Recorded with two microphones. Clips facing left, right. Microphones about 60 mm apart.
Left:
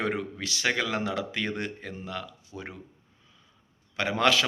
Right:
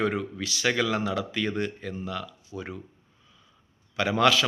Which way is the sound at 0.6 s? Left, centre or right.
Left.